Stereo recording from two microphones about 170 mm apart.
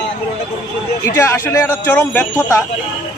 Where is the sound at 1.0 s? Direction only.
15° left (ahead or behind).